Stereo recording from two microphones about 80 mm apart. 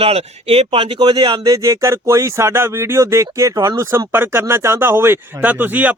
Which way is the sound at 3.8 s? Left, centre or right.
Right.